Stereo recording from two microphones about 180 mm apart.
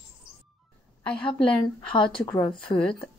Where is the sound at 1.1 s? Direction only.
5° left (ahead or behind).